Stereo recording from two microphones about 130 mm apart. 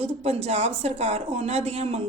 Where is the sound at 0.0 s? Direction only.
55° right (ahead or behind).